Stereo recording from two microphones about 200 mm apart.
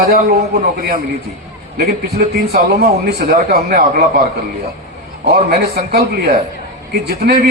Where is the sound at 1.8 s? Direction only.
50° right (ahead or behind).